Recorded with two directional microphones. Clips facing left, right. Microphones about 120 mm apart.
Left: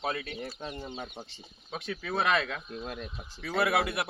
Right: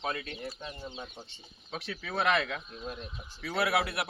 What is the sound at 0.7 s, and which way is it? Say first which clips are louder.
Speech: left 3 dB; 55° left (ahead or behind).